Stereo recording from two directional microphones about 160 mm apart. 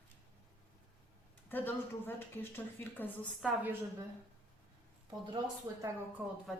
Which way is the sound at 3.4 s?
10° right (ahead or behind).